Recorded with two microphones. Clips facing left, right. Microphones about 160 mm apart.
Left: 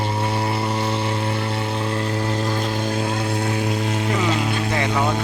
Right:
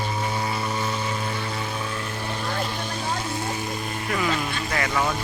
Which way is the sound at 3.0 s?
65° left (ahead or behind).